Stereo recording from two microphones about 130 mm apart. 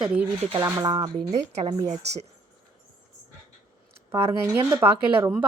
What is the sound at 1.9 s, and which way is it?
Speech, 55° right (ahead or behind).